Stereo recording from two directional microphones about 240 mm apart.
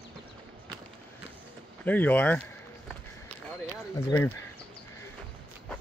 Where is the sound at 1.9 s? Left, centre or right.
Centre.